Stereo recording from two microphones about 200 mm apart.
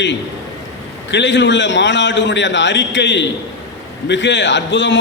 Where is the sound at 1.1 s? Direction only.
60° left (ahead or behind).